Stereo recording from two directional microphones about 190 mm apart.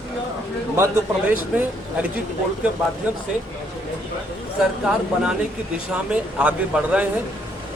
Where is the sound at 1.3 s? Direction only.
10° right (ahead or behind).